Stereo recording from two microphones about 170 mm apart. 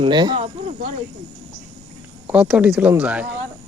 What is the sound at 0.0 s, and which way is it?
Speech, 25° right (ahead or behind).